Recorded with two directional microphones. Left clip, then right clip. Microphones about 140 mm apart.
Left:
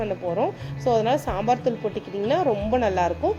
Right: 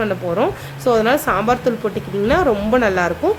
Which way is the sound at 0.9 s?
20° left (ahead or behind).